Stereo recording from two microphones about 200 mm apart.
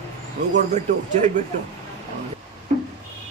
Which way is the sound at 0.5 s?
35° right (ahead or behind).